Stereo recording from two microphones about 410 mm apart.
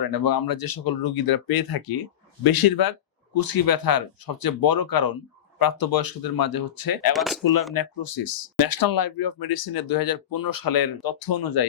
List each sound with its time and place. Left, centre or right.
0.1 s speech: left
7.1 s speech: centre
7.7 s speech: left